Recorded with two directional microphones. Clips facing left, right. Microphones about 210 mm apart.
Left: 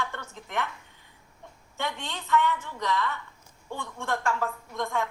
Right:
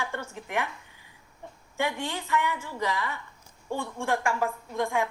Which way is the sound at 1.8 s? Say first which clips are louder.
Right 4 dB; 10° right (ahead or behind).